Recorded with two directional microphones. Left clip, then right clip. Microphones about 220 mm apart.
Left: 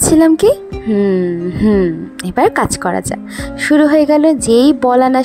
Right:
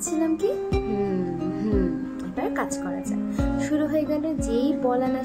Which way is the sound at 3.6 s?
40° left (ahead or behind).